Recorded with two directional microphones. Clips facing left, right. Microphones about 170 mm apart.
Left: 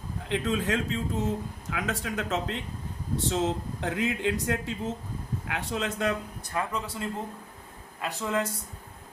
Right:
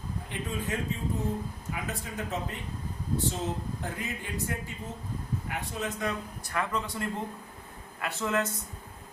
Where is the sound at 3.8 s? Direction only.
85° left.